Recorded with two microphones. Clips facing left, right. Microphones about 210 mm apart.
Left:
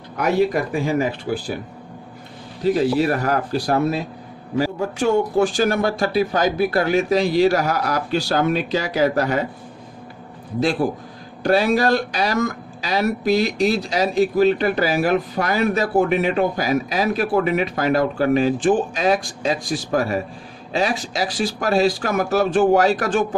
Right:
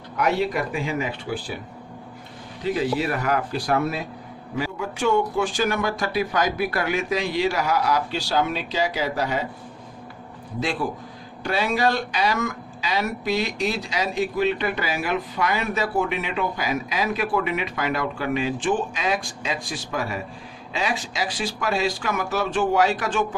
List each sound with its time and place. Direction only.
0.2 s speech: 45° left (ahead or behind)
2.6 s speech: 40° left (ahead or behind)
10.6 s speech: 40° left (ahead or behind)